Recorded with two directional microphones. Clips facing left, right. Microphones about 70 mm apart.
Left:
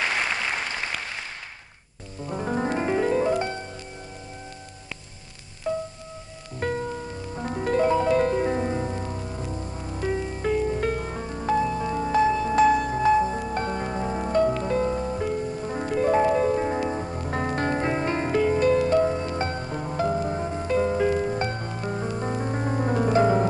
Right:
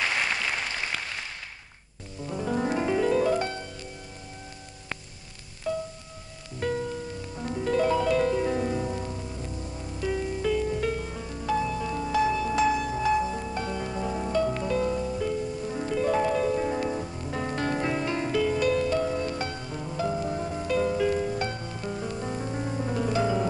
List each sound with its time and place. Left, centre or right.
2.2 s music: left
5.7 s music: left